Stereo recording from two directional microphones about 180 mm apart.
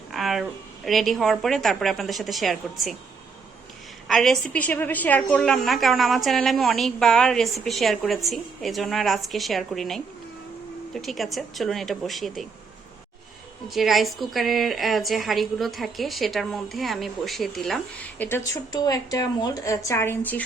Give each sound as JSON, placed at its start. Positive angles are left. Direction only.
{"t": 0.1, "sound": "a woman's voice", "side_deg": 0}
{"t": 4.1, "sound": "a woman's voice", "side_deg": 0}
{"t": 13.7, "sound": "a woman's voice", "side_deg": 0}
{"t": 18.2, "sound": "a woman's voice", "side_deg": 15}